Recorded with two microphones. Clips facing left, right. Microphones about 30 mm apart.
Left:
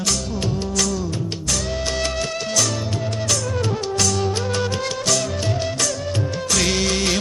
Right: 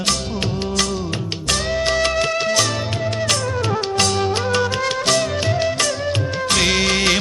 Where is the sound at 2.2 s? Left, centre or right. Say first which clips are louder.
Right 4 dB; right.